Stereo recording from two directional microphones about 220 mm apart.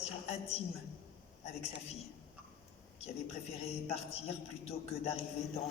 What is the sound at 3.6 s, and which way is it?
A woman's voice, 30° left (ahead or behind).